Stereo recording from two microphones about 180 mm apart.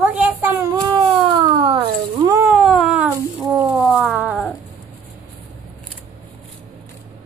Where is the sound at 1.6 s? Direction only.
30° right (ahead or behind).